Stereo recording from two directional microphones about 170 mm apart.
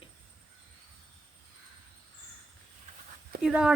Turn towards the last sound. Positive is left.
turn(degrees=-5)  # may be behind; listen again after turning